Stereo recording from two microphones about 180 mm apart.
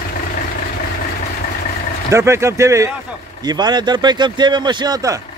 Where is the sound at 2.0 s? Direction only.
15° right (ahead or behind).